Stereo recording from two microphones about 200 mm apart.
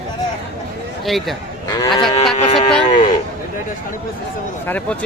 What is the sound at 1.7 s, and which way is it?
Speech, 20° left (ahead or behind).